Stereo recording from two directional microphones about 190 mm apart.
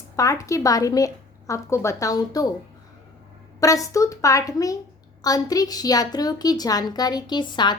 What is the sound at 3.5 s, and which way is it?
A woman's voice, 15° left (ahead or behind).